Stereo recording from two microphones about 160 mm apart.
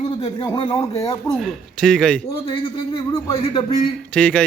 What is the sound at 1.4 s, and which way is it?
Speech, centre (ahead or behind).